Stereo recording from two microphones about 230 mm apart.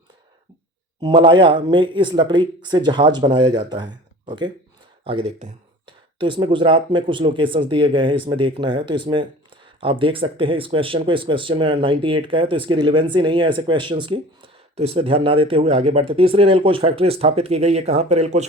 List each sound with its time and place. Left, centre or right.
1.0 s speech: right